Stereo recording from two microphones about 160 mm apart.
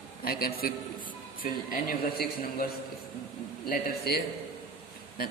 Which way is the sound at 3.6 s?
70° left (ahead or behind).